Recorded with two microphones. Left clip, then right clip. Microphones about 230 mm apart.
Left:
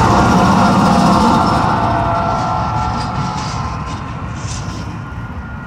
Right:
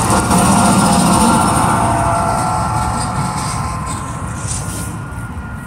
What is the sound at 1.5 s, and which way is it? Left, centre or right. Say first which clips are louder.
Vehicle: even; centre.